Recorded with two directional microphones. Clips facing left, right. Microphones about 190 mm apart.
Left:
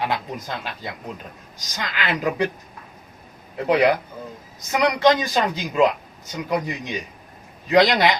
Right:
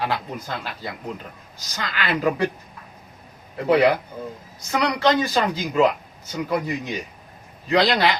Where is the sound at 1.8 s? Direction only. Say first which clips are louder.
Right 1 dB; 15° left (ahead or behind).